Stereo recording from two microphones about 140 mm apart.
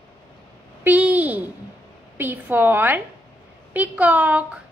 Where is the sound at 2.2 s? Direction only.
15° right (ahead or behind).